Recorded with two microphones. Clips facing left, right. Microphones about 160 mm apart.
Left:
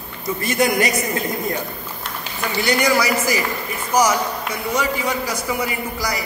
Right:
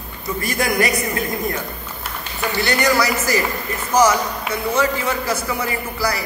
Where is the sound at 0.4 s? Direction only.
20° left (ahead or behind).